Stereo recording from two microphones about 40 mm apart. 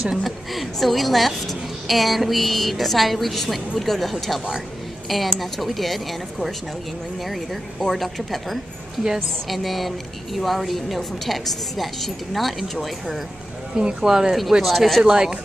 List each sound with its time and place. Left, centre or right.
0.2 s a woman's voice: centre
7.8 s a woman's voice: centre
13.7 s speech: centre
14.6 s a woman's voice: centre